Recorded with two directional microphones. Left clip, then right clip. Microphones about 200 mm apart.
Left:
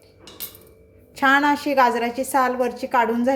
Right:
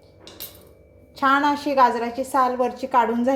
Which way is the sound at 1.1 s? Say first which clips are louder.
Left 2 dB; 10° left (ahead or behind).